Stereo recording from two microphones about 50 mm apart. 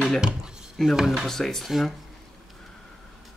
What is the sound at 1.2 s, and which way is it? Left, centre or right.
Speech, centre.